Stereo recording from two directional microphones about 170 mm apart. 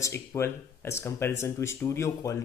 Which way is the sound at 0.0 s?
15° left (ahead or behind).